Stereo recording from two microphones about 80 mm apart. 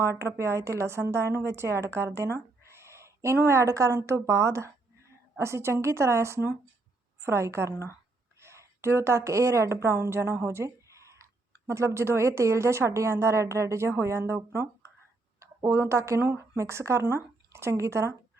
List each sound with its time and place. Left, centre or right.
0.0 s a woman's voice: right
16.2 s a woman's voice: right
16.6 s speech: right